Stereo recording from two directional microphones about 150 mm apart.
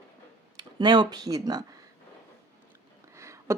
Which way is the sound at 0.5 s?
30° right (ahead or behind).